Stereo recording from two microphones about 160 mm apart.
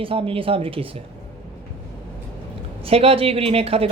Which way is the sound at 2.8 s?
40° right (ahead or behind).